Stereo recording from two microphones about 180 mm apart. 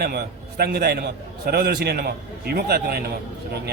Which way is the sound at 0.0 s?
60° right (ahead or behind).